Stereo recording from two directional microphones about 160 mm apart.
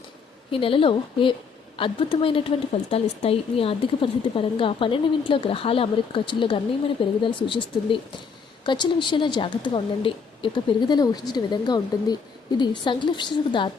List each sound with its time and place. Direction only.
0.5 s a woman's voice: 35° left (ahead or behind)